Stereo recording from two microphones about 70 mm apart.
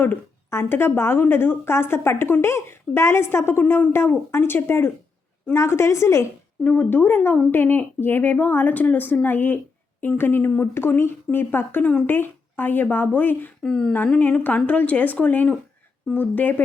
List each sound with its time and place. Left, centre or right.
0.0 s a woman's voice: left
6.7 s a woman's voice: left
13.6 s speech: centre
14.2 s speech: left